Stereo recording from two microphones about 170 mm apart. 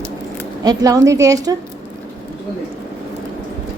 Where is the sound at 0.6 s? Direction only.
20° right (ahead or behind).